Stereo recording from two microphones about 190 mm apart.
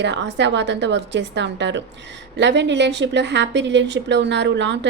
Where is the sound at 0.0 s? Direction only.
70° right (ahead or behind).